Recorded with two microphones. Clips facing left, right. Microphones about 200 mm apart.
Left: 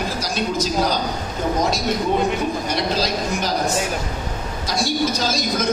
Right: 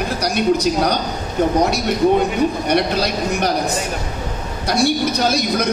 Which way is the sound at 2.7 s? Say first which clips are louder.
Right 4 dB; 60° right (ahead or behind).